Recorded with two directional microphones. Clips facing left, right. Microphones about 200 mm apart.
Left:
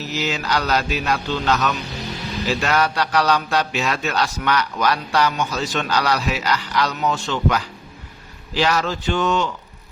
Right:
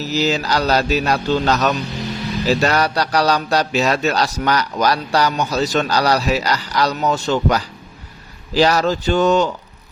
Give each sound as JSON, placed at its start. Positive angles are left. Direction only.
{"t": 0.0, "sound": "speech", "side_deg": -35}